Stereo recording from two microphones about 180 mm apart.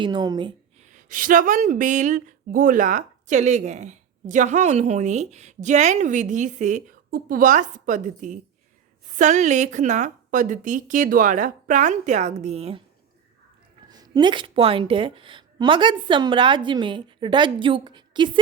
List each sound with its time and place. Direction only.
0.0 s a woman's voice: 25° right (ahead or behind)
0.8 s speech: 45° right (ahead or behind)
13.9 s a woman's voice: 20° right (ahead or behind)